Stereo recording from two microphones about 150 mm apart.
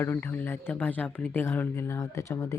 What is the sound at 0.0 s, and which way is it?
Speech, 15° left (ahead or behind).